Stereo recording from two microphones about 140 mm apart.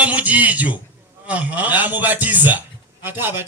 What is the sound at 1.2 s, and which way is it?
A man's voice, 10° right (ahead or behind).